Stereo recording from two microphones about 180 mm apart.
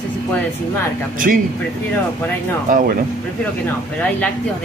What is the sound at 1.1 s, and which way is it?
Speech, 50° right (ahead or behind).